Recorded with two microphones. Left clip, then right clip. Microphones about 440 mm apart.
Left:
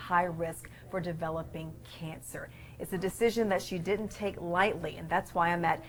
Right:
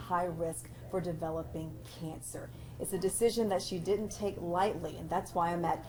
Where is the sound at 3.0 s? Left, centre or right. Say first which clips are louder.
Left 1 dB; left.